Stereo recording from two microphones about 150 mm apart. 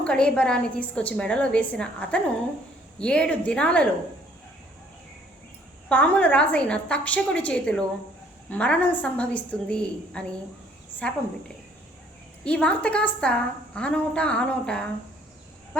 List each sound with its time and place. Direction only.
0.0 s a woman's voice: 5° left (ahead or behind)
5.9 s a woman's voice: 10° left (ahead or behind)
12.5 s a woman's voice: 5° left (ahead or behind)